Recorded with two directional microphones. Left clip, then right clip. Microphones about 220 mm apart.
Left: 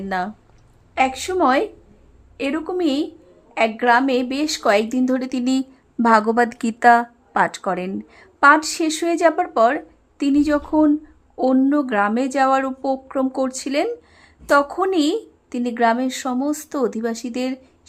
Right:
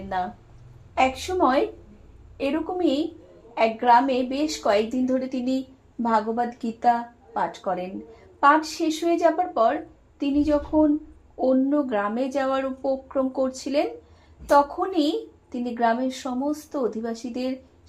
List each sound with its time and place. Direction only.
0.9 s a woman's voice: 25° left (ahead or behind)
6.8 s a woman's voice: 35° left (ahead or behind)